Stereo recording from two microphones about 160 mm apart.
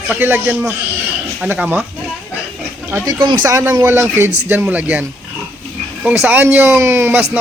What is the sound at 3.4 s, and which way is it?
Speech, 15° right (ahead or behind).